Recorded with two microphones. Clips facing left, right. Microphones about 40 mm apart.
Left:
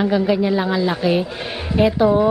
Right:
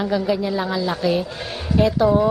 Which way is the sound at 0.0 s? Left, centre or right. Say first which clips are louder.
Left 4 dB; centre.